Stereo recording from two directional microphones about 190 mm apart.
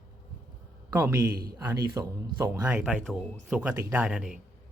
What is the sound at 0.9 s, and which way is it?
Speech, 10° right (ahead or behind).